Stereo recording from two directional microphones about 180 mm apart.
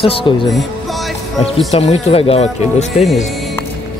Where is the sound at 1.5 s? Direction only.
35° left (ahead or behind).